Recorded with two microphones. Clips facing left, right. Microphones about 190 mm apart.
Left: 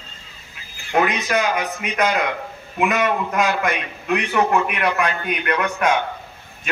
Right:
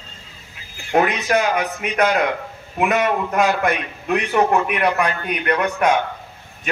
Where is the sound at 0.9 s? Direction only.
40° right (ahead or behind).